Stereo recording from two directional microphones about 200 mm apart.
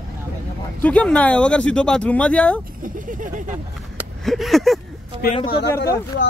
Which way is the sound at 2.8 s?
40° right (ahead or behind).